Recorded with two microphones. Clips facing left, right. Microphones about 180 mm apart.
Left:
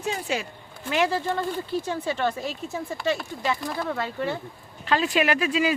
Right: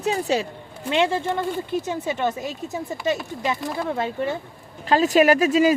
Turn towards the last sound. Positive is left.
turn(degrees=-40)  # may be behind; listen again after turning